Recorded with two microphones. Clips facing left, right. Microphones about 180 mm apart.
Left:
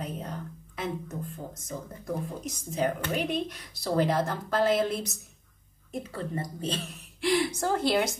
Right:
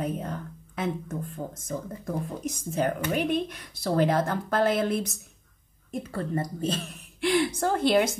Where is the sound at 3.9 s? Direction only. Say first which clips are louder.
Right 2 dB; 55° right (ahead or behind).